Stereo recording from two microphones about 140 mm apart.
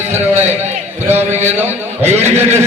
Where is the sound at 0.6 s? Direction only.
15° right (ahead or behind).